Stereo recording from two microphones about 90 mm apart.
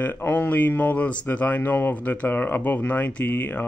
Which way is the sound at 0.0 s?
20° left (ahead or behind).